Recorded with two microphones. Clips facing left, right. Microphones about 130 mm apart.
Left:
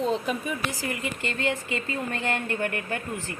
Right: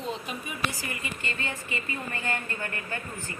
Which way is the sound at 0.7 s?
90° left.